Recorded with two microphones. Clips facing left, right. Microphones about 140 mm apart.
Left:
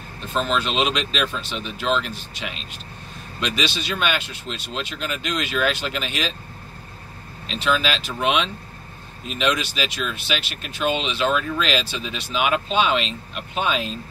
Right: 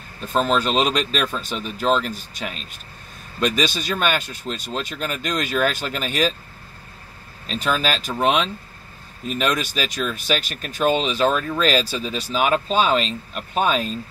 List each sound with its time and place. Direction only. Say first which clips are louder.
0.3 s speech: right 4 dB; 45° right (ahead or behind)
7.4 s speech: even; 45° right (ahead or behind)